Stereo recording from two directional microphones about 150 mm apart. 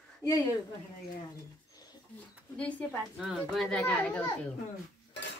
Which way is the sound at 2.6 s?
10° left (ahead or behind).